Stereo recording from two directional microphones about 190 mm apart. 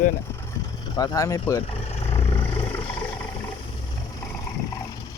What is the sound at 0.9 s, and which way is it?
Speech, 20° left (ahead or behind).